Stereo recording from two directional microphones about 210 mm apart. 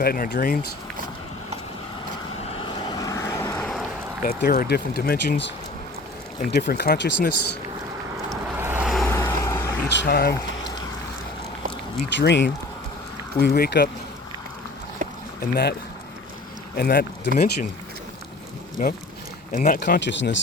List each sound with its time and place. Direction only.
0.0 s speech: 45° left (ahead or behind)
2.5 s vehicle: 25° left (ahead or behind)
4.2 s speech: 45° left (ahead or behind)
8.3 s vehicle: 10° right (ahead or behind)
9.0 s vehicle: 10° left (ahead or behind)
9.9 s speech: 50° left (ahead or behind)
12.0 s speech: 55° left (ahead or behind)
15.4 s speech: 50° left (ahead or behind)
16.7 s speech: 45° left (ahead or behind)
18.8 s speech: 45° left (ahead or behind)
19.8 s speech: 55° left (ahead or behind)